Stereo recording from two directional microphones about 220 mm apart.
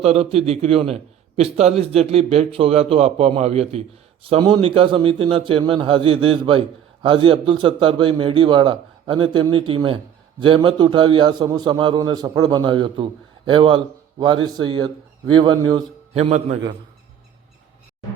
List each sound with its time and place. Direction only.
0.0 s a man's voice: 30° right (ahead or behind)